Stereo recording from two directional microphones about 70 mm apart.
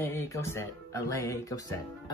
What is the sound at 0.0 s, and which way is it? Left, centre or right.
Speech, left.